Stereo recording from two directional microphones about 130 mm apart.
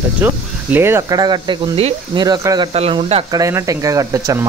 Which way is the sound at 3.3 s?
25° right (ahead or behind).